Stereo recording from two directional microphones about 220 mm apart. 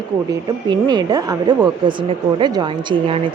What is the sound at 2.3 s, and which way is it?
Speech, 20° right (ahead or behind).